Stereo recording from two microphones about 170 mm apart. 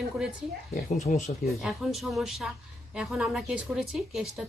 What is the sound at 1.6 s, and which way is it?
A woman's voice, centre (ahead or behind).